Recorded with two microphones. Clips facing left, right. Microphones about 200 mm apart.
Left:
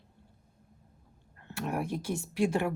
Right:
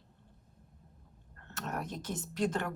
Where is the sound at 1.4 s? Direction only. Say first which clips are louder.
Left 6 dB; 10° left (ahead or behind).